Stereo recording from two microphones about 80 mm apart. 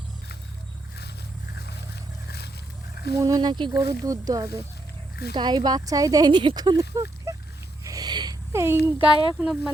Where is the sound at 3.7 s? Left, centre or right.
Right.